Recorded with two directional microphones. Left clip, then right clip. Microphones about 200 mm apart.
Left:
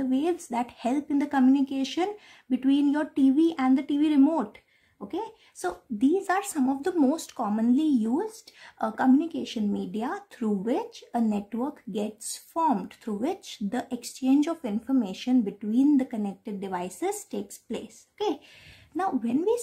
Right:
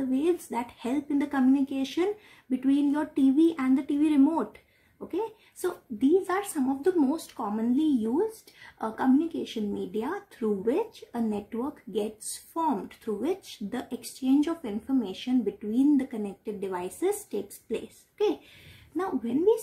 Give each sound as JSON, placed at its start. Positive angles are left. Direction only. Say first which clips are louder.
{"t": 0.1, "sound": "speech", "louder": "right 2 dB", "side_deg": 40}